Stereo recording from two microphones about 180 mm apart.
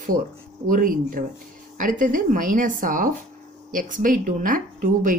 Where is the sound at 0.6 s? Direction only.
50° right (ahead or behind).